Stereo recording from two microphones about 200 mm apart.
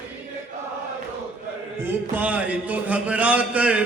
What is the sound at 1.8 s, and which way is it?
Mantra, 10° right (ahead or behind).